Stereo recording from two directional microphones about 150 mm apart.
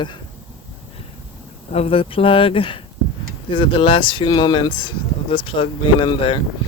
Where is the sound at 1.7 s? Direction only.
40° left (ahead or behind).